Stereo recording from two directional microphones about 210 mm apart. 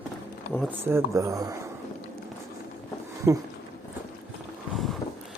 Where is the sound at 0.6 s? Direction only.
10° right (ahead or behind).